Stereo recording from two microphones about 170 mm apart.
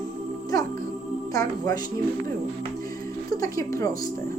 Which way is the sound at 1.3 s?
20° left (ahead or behind).